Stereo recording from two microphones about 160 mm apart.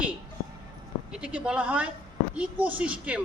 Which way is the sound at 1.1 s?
5° right (ahead or behind).